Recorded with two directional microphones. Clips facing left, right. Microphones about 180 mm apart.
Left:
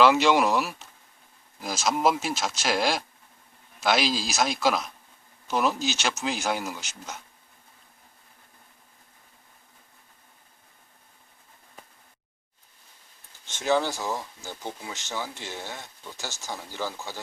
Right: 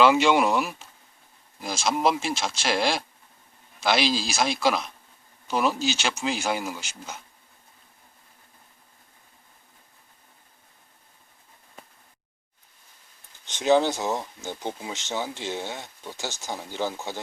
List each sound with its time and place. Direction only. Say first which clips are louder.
0.0 s speech: right 1 dB; centre (ahead or behind)
13.4 s speech: right 4 dB; 20° right (ahead or behind)